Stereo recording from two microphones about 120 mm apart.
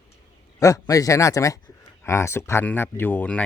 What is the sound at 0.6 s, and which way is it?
Speech, 30° left (ahead or behind).